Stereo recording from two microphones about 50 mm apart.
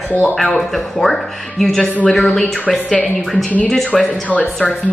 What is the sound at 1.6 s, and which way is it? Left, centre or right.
Speech, centre.